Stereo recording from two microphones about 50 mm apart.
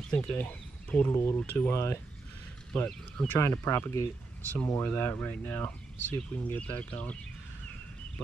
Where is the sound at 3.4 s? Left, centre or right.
Left.